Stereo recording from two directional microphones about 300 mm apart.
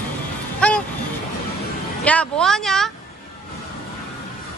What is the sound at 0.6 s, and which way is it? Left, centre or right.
Vehicle, centre.